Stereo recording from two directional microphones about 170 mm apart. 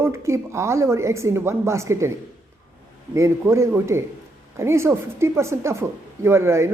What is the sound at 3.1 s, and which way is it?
Speech, 15° right (ahead or behind).